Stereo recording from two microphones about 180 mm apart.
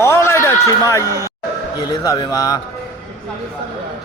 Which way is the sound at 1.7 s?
20° left (ahead or behind).